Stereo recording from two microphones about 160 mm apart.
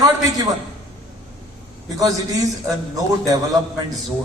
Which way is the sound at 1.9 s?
20° right (ahead or behind).